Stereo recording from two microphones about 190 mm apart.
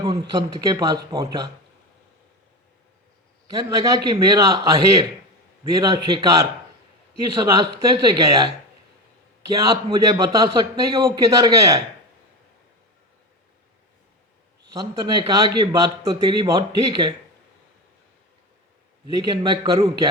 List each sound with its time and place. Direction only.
0.0 s a man's voice: 20° right (ahead or behind)
3.6 s a man's voice: 20° right (ahead or behind)
9.6 s a man's voice: 20° right (ahead or behind)
14.7 s a man's voice: 20° right (ahead or behind)
19.1 s a man's voice: 20° right (ahead or behind)